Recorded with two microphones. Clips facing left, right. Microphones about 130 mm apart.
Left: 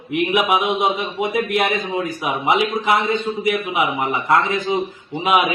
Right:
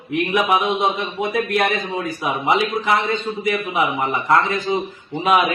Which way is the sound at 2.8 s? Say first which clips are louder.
Left 1 dB; 15° left (ahead or behind).